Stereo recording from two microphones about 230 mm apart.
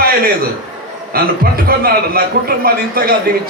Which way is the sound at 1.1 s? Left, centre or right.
Right.